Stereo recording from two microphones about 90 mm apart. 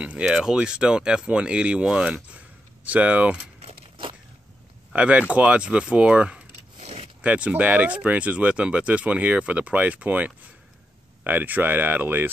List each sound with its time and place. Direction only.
0.0 s speech: 10° right (ahead or behind)
4.9 s speech: 15° right (ahead or behind)